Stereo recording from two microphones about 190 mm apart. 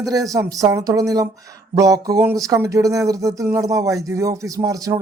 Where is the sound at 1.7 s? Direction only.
20° right (ahead or behind).